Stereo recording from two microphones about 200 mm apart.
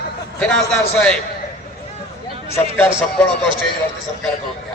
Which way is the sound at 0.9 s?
5° left (ahead or behind).